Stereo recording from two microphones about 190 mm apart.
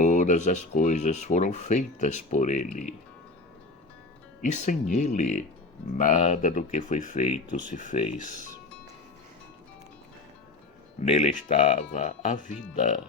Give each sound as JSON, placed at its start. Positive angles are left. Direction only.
{"t": 0.0, "sound": "speech", "side_deg": 40}
{"t": 4.4, "sound": "speech", "side_deg": 40}
{"t": 11.0, "sound": "speech", "side_deg": 35}